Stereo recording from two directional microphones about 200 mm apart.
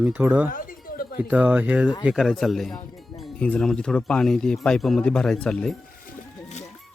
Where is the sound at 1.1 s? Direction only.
5° right (ahead or behind).